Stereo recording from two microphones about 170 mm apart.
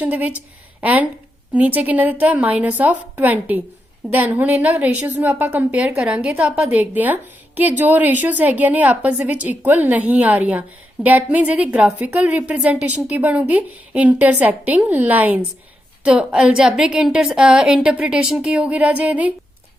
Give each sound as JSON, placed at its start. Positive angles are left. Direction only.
{"t": 0.0, "sound": "a woman's voice", "side_deg": -10}